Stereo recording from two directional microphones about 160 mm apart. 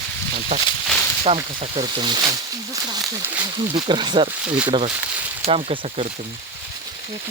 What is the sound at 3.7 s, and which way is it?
Speech, 30° right (ahead or behind).